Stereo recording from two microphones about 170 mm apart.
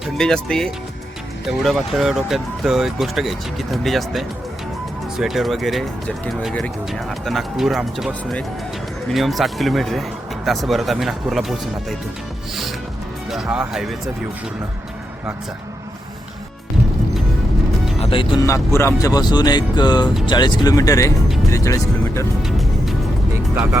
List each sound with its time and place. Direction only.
0.0 s speech: 5° left (ahead or behind)
13.3 s speech: 5° right (ahead or behind)
18.0 s speech: 30° left (ahead or behind)
22.4 s music: centre (ahead or behind)